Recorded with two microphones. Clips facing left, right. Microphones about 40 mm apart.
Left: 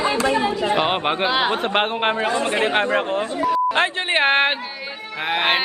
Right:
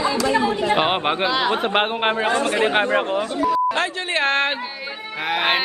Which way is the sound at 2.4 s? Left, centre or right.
Left.